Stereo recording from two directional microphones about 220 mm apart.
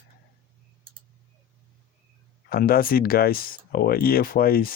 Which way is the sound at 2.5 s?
45° left (ahead or behind).